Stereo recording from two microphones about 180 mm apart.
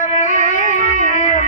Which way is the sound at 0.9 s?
45° left (ahead or behind).